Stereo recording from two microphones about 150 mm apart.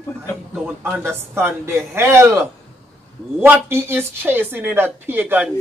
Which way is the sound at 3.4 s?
15° right (ahead or behind).